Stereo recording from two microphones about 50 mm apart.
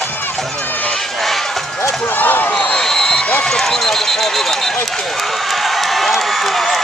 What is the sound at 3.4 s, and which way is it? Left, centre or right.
Run, centre.